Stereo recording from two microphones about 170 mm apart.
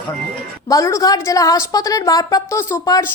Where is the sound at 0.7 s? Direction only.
20° left (ahead or behind).